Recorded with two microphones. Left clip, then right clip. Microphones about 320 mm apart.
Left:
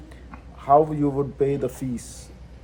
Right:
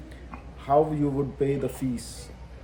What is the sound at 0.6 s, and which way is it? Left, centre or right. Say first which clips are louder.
A man's voice: left 5 dB; centre.